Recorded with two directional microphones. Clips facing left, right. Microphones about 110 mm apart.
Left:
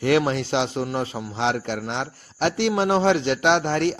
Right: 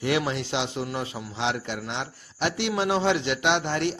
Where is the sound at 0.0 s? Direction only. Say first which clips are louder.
Left 6 dB; 45° left (ahead or behind).